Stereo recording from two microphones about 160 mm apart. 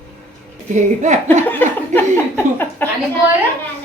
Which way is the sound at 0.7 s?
50° right (ahead or behind).